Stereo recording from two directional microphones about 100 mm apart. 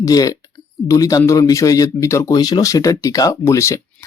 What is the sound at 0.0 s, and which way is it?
A man's voice, 35° left (ahead or behind).